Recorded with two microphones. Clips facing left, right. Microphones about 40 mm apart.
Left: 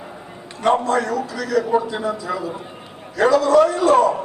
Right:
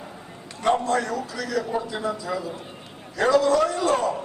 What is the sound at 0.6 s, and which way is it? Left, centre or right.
A man's voice, centre.